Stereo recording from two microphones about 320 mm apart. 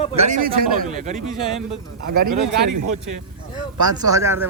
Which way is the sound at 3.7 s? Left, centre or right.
Right.